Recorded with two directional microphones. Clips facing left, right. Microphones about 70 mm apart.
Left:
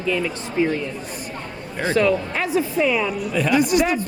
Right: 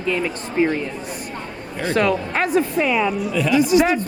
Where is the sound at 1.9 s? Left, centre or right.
Right.